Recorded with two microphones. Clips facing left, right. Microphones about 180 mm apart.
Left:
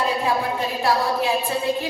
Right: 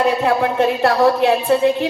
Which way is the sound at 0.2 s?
65° right (ahead or behind).